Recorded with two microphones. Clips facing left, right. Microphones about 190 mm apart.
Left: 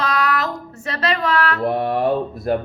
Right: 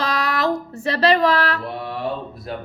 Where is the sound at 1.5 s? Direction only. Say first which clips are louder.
Left 9 dB; 50° left (ahead or behind).